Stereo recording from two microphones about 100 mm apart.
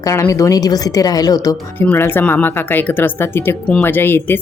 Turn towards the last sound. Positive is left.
turn(degrees=20)  # may be behind; listen again after turning